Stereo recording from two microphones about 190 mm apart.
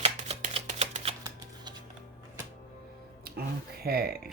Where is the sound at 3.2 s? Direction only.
55° right (ahead or behind).